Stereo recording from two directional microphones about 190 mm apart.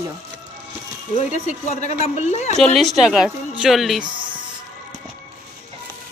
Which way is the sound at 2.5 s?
Centre (ahead or behind).